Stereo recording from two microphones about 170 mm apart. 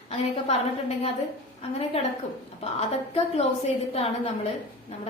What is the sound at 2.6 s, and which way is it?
A woman's voice, 35° left (ahead or behind).